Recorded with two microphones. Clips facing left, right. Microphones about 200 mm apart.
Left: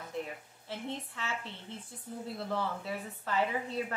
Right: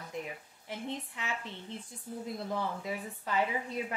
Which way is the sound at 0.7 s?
15° right (ahead or behind).